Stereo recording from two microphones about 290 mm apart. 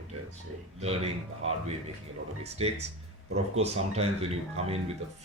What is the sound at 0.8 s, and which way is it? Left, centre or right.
Speech, right.